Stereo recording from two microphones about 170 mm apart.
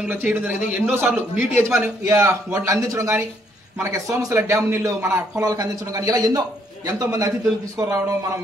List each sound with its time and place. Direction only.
0.3 s a man's voice: 10° right (ahead or behind)
1.5 s a man's voice: 15° right (ahead or behind)